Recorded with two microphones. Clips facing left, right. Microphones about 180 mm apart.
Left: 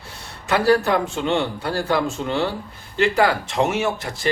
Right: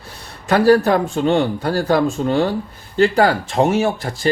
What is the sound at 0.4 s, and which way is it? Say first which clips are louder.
Speech: right 5 dB; 40° right (ahead or behind).